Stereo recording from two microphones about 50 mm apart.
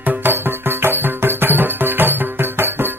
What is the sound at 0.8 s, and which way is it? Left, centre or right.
Music, right.